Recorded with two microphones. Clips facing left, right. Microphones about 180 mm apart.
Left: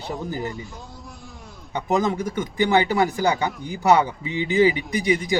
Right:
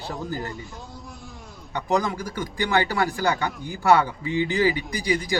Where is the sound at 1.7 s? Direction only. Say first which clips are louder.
Left 2 dB; 20° left (ahead or behind).